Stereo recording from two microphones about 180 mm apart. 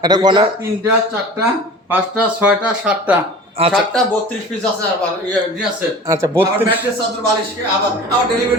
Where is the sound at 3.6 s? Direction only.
35° right (ahead or behind).